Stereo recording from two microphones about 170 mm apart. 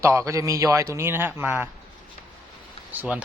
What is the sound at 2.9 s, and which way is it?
Speech, 10° right (ahead or behind).